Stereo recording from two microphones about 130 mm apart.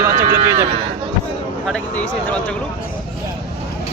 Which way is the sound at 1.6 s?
5° left (ahead or behind).